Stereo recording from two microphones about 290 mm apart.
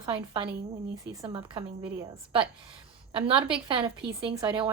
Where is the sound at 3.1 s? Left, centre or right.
Centre.